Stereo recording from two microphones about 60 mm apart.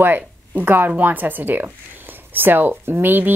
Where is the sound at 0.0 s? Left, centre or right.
Right.